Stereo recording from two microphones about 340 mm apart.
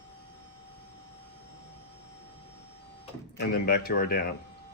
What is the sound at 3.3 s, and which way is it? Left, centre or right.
Speech, left.